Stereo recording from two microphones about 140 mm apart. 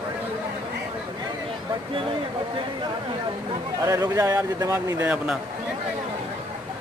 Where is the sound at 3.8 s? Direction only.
20° right (ahead or behind).